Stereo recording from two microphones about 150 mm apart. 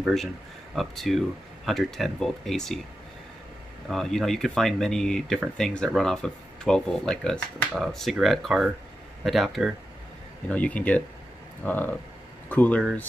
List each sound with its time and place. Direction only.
0.0 s speech: centre (ahead or behind)
3.9 s speech: centre (ahead or behind)
10.5 s speech: 10° left (ahead or behind)